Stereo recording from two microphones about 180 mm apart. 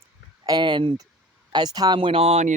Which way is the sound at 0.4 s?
25° right (ahead or behind).